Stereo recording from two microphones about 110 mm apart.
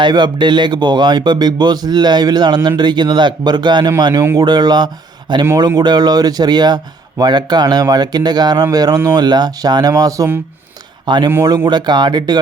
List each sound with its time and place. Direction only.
0.0 s speech: 45° right (ahead or behind)
11.0 s speech: 45° right (ahead or behind)